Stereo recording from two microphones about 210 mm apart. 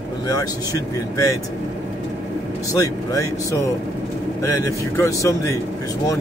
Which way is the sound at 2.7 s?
15° left (ahead or behind).